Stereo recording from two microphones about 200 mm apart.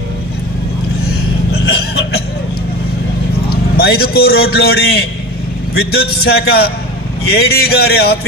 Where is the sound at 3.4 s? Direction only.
50° left (ahead or behind).